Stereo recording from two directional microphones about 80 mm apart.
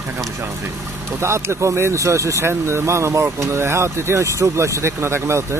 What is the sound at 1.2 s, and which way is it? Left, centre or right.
Speech, right.